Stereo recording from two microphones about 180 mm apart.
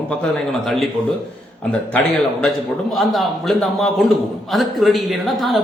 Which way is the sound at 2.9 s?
Centre (ahead or behind).